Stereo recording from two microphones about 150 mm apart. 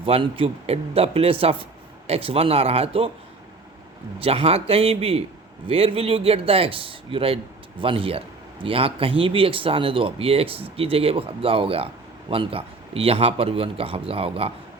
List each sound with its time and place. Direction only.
0.0 s speech: 35° right (ahead or behind)
4.2 s speech: 40° right (ahead or behind)